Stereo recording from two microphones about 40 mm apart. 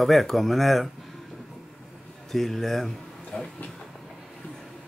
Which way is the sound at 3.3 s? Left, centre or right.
Left.